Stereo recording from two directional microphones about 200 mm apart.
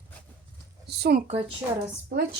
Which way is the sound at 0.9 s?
55° right (ahead or behind).